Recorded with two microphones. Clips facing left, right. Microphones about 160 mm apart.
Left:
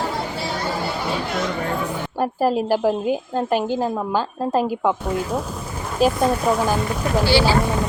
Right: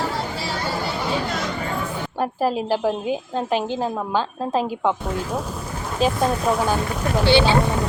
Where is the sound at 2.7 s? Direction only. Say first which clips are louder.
Left 3 dB; 5° left (ahead or behind).